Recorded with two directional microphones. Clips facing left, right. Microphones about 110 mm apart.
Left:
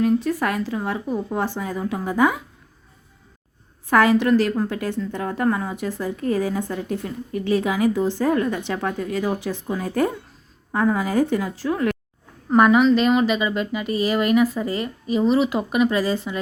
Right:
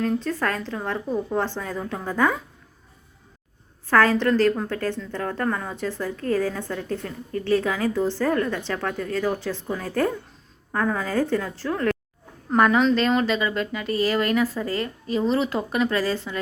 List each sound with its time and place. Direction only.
0.0 s a woman's voice: 10° left (ahead or behind)
3.8 s a woman's voice: 15° left (ahead or behind)